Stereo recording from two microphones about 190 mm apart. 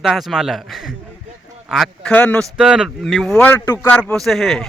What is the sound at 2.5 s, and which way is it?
Speech, 5° right (ahead or behind).